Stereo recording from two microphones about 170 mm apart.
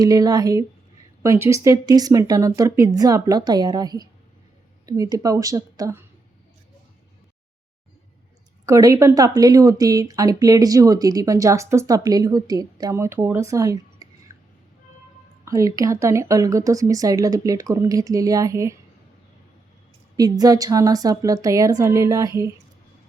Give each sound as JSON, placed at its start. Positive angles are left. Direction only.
{"t": 0.0, "sound": "speech", "side_deg": -20}
{"t": 8.6, "sound": "speech", "side_deg": -20}
{"t": 14.3, "sound": "a sound", "side_deg": -20}
{"t": 15.4, "sound": "speech", "side_deg": -20}
{"t": 20.1, "sound": "speech", "side_deg": -20}